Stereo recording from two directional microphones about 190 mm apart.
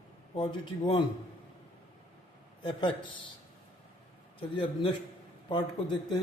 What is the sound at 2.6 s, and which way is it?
Speech, 25° left (ahead or behind).